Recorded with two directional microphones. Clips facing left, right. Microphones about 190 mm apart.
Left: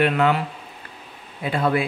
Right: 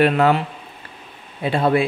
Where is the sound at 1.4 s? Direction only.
30° right (ahead or behind).